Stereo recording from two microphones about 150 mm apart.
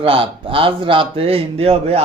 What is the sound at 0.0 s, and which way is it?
A man's voice, 35° right (ahead or behind).